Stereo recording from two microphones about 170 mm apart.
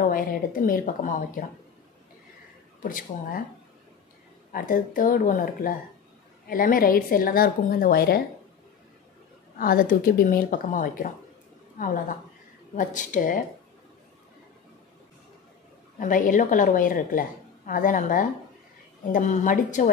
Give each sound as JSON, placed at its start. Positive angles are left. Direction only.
{"t": 0.0, "sound": "a woman's voice", "side_deg": 55}
{"t": 2.8, "sound": "a woman's voice", "side_deg": 50}
{"t": 4.5, "sound": "a woman's voice", "side_deg": 55}
{"t": 9.6, "sound": "a woman's voice", "side_deg": 55}
{"t": 16.0, "sound": "a woman's voice", "side_deg": 50}